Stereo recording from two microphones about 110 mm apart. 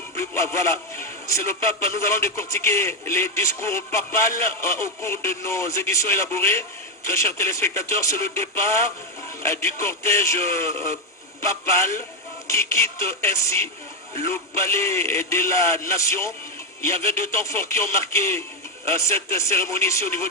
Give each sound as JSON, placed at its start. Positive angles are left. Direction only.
{"t": 0.2, "sound": "speech", "side_deg": 25}